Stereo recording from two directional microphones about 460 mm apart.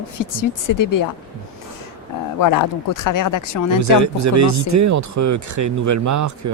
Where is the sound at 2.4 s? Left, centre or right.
Left.